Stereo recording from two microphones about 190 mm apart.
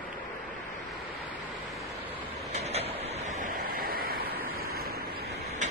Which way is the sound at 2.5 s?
35° right (ahead or behind).